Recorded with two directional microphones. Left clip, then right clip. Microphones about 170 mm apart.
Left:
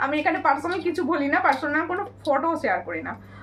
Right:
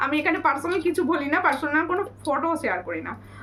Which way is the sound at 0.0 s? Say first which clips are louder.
Even; 20° right (ahead or behind).